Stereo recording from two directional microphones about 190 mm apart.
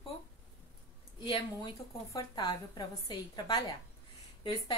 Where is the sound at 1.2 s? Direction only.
25° left (ahead or behind).